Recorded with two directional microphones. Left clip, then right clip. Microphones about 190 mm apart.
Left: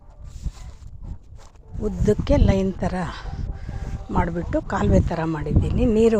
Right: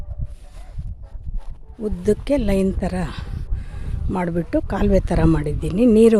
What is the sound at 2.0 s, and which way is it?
Speech, 20° right (ahead or behind).